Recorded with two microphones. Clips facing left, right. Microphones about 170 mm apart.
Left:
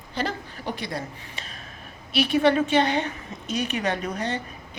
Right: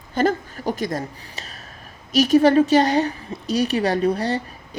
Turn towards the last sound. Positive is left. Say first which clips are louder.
# right 8 dB
turn(degrees=-35)  # may be behind; listen again after turning